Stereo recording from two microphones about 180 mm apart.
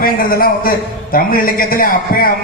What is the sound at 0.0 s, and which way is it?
A man's voice, 55° left (ahead or behind).